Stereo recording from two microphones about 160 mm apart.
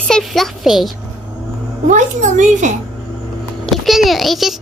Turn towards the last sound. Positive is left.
turn(degrees=0)  # may be behind; listen again after turning